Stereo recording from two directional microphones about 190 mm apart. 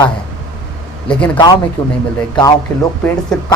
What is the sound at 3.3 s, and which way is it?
Speech, 5° left (ahead or behind).